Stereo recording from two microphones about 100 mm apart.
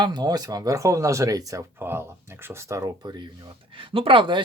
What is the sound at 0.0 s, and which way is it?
Speech, 45° right (ahead or behind).